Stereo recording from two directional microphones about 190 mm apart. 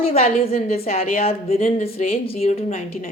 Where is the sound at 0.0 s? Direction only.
30° left (ahead or behind).